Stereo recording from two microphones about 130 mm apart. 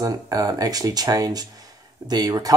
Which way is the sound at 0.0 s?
30° right (ahead or behind).